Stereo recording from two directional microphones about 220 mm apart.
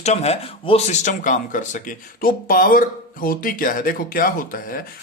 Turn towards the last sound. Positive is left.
turn(degrees=40)  # may be behind; listen again after turning